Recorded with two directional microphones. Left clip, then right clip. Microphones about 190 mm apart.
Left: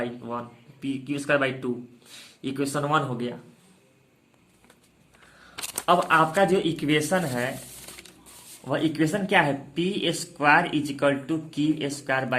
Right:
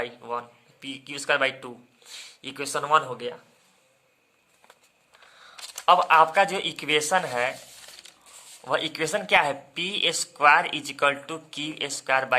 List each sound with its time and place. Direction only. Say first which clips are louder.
0.0 s speech: right 1 dB; 35° right (ahead or behind)
5.8 s a man's voice: right 3 dB; 30° right (ahead or behind)
8.6 s a man's voice: left 1 dB; 35° right (ahead or behind)